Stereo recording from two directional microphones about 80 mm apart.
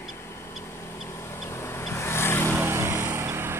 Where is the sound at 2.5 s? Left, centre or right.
Right.